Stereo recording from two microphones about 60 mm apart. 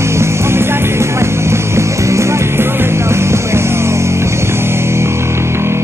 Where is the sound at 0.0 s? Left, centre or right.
Right.